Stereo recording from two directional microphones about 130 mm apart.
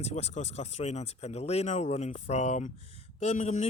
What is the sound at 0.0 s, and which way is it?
Speech, 55° left (ahead or behind).